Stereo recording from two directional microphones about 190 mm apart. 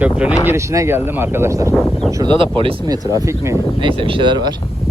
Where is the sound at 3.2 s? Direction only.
15° right (ahead or behind).